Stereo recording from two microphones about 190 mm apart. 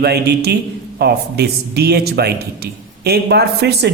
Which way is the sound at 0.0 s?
60° right (ahead or behind).